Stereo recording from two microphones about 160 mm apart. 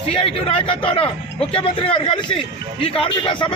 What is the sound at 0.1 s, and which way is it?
A man's voice, 35° left (ahead or behind).